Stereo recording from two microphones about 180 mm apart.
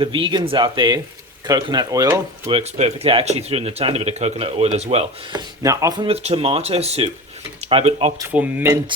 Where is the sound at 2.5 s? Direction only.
35° right (ahead or behind).